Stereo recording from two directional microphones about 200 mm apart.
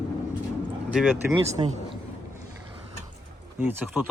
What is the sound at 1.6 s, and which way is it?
Speech, 25° right (ahead or behind).